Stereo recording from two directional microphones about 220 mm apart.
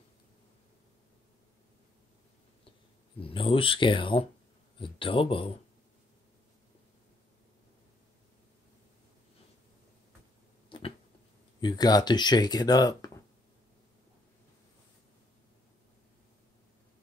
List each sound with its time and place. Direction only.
3.2 s speech: 25° left (ahead or behind)
10.7 s a sound: 25° left (ahead or behind)
11.6 s speech: 20° left (ahead or behind)